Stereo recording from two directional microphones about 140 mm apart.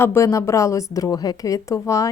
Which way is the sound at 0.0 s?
20° left (ahead or behind).